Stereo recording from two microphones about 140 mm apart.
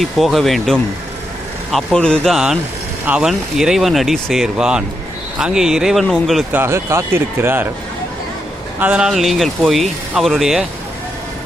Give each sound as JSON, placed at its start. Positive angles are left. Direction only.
{"t": 0.0, "sound": "speech", "side_deg": 0}
{"t": 6.5, "sound": "speech", "side_deg": -15}
{"t": 8.8, "sound": "speech", "side_deg": -10}